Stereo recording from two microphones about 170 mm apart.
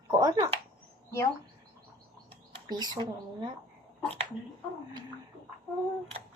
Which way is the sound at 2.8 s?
25° right (ahead or behind).